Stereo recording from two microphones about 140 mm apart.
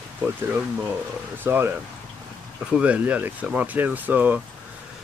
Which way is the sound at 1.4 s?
15° right (ahead or behind).